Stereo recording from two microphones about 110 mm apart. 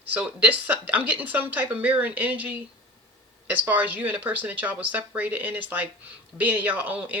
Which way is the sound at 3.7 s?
15° right (ahead or behind).